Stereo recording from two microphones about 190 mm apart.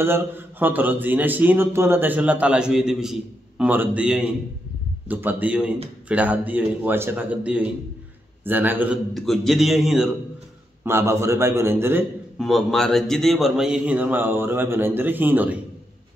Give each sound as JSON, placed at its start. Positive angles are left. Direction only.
{"t": 0.0, "sound": "a man's voice", "side_deg": -10}
{"t": 10.8, "sound": "speech", "side_deg": -15}
{"t": 12.4, "sound": "speech", "side_deg": 0}